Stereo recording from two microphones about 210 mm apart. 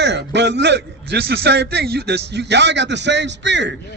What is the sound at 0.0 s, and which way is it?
A man's voice, 55° right (ahead or behind).